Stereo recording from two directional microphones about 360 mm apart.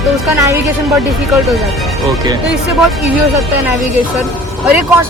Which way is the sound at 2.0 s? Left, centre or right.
Centre.